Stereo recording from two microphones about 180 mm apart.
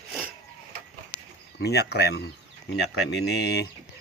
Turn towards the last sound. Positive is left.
turn(degrees=70)  # may be behind; listen again after turning